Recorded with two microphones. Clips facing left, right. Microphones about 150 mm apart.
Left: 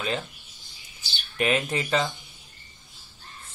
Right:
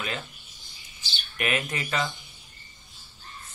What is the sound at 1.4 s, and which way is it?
Speech, 30° left (ahead or behind).